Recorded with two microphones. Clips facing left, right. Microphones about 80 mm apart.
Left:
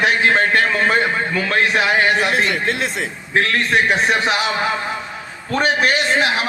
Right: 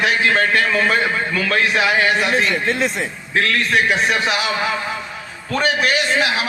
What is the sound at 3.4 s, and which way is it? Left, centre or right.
A man's voice, left.